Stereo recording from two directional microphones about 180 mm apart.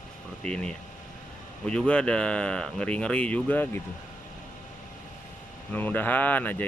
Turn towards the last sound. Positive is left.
turn(degrees=10)  # may be behind; listen again after turning